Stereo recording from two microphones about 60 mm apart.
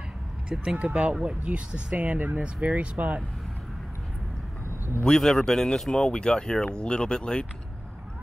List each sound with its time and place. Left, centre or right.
0.7 s speech: right
5.0 s speech: centre